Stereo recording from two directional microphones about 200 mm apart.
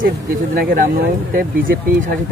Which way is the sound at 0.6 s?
50° right (ahead or behind).